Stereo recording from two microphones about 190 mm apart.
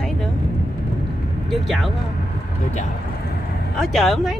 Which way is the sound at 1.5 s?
Centre (ahead or behind).